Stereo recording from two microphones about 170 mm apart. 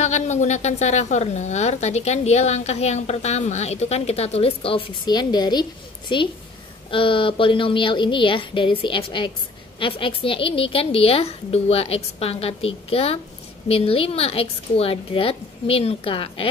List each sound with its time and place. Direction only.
0.0 s a woman's voice: 45° left (ahead or behind)